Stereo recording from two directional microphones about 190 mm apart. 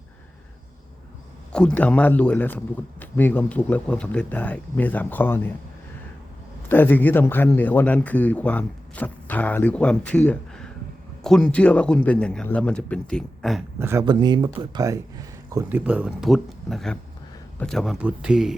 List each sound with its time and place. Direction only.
1.5 s a man's voice: 5° left (ahead or behind)
6.7 s a man's voice: 10° left (ahead or behind)
13.7 s speech: 15° right (ahead or behind)
14.0 s speech: 25° right (ahead or behind)
15.8 s a man's voice: 5° right (ahead or behind)